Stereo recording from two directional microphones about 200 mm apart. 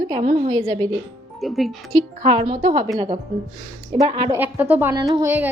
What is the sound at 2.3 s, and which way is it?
Speech, 35° right (ahead or behind).